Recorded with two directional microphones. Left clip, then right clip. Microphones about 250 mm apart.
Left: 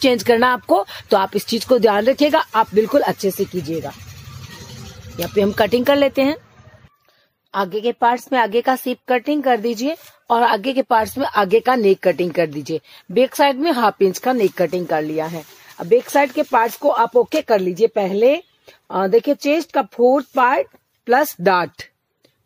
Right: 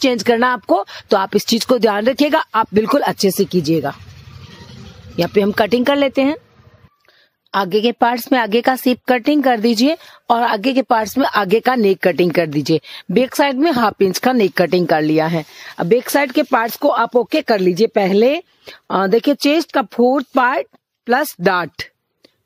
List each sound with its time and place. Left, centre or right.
0.0 s speech: right
5.1 s speech: right
7.5 s speech: right